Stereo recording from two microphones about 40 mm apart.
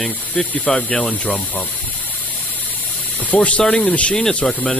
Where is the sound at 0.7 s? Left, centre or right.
Left.